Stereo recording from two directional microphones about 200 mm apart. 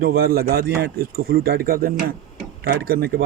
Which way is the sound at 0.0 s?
50° right (ahead or behind).